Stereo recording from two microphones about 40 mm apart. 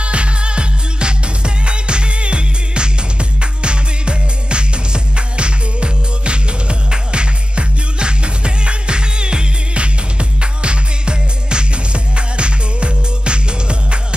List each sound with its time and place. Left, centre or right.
0.0 s music: right